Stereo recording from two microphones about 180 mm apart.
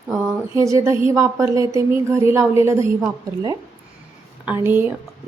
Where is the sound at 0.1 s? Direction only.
15° right (ahead or behind).